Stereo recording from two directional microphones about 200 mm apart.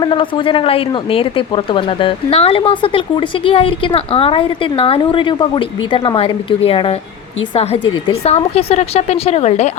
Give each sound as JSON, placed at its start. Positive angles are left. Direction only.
{"t": 0.0, "sound": "a woman's voice", "side_deg": 25}